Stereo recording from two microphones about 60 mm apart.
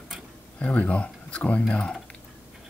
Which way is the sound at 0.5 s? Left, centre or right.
Left.